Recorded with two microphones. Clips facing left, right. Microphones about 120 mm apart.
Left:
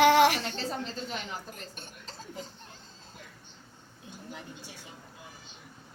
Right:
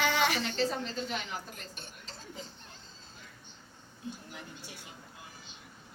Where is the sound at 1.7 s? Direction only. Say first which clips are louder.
Left 2 dB; 45° left (ahead or behind).